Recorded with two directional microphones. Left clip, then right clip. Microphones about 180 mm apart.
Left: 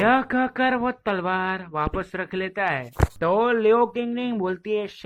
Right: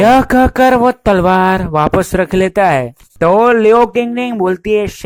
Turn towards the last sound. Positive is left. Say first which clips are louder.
# right 13 dB
turn(degrees=-30)  # may be behind; listen again after turning